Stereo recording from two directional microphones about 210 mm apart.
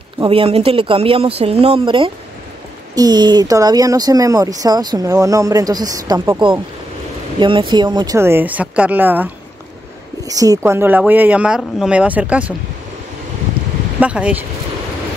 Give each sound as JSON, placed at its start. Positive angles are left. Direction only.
{"t": 0.2, "sound": "speech", "side_deg": -25}
{"t": 13.9, "sound": "speech", "side_deg": -5}